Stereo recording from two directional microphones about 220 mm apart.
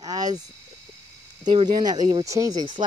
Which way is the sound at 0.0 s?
15° right (ahead or behind).